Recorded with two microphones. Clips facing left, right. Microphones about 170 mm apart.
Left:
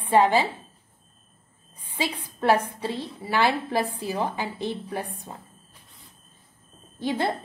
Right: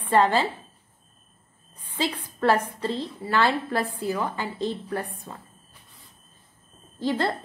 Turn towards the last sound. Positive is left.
turn(degrees=15)  # may be behind; listen again after turning